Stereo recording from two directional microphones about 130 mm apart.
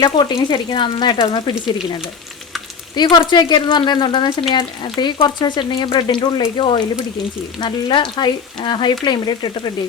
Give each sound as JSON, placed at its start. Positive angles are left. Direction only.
{"t": 0.0, "sound": "speech", "side_deg": 35}
{"t": 2.9, "sound": "speech", "side_deg": 35}